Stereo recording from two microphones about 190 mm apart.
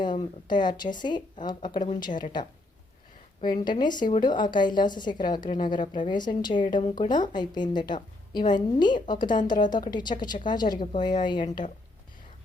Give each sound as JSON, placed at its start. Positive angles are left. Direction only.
{"t": 0.0, "sound": "a woman's voice", "side_deg": 25}
{"t": 3.4, "sound": "a woman's voice", "side_deg": 20}